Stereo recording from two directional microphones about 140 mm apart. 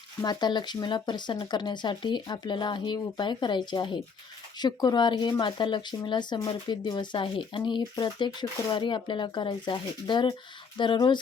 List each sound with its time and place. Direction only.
0.2 s speech: 30° left (ahead or behind)